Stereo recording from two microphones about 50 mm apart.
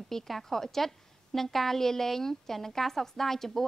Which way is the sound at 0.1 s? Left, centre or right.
Centre.